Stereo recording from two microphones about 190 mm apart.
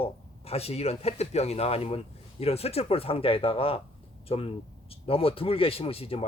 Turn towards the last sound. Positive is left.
turn(degrees=30)  # may be behind; listen again after turning